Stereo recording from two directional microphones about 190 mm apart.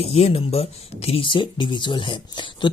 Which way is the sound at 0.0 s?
30° left (ahead or behind).